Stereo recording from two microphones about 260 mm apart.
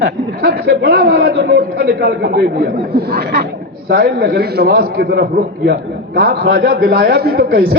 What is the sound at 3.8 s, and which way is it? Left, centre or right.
A man's voice, right.